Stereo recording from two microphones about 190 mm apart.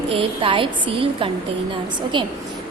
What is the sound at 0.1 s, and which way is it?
A woman's voice, 25° right (ahead or behind).